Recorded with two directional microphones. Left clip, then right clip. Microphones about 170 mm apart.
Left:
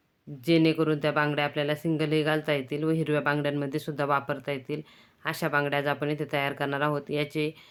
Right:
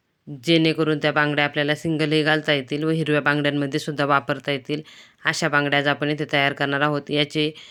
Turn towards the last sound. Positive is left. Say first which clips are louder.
# right 7 dB
turn(degrees=-25)  # may be behind; listen again after turning